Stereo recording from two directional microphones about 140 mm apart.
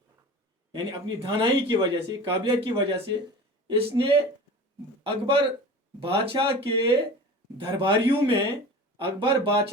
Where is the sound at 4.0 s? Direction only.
30° right (ahead or behind).